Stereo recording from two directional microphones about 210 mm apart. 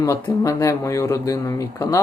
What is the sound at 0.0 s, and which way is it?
Speech, 15° left (ahead or behind).